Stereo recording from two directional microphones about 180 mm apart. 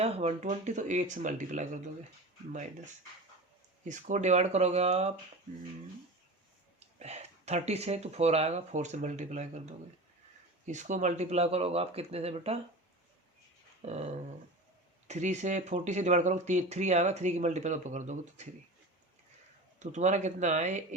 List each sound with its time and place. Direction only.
0.0 s speech: 35° right (ahead or behind)
6.7 s speech: 35° right (ahead or behind)
13.8 s speech: 40° right (ahead or behind)
19.8 s speech: 40° right (ahead or behind)